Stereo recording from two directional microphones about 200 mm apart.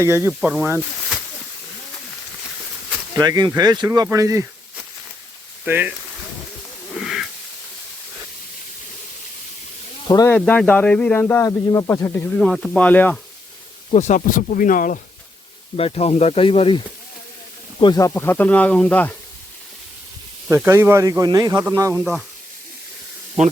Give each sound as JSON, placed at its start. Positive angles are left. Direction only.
{"t": 0.0, "sound": "speech", "side_deg": -15}
{"t": 3.2, "sound": "speech", "side_deg": -20}
{"t": 5.6, "sound": "speech", "side_deg": -10}
{"t": 6.9, "sound": "hiss", "side_deg": 0}
{"t": 10.1, "sound": "speech", "side_deg": 20}
{"t": 10.3, "sound": "speech", "side_deg": 5}
{"t": 13.9, "sound": "speech", "side_deg": 35}
{"t": 15.7, "sound": "speech", "side_deg": 30}
{"t": 18.1, "sound": "speech", "side_deg": 10}
{"t": 20.5, "sound": "speech", "side_deg": -15}
{"t": 23.4, "sound": "speech", "side_deg": -35}